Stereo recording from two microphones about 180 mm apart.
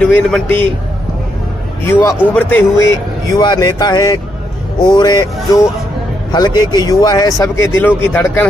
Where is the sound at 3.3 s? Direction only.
25° left (ahead or behind).